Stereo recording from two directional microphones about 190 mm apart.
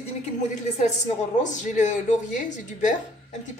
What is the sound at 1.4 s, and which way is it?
A woman's voice, 40° left (ahead or behind).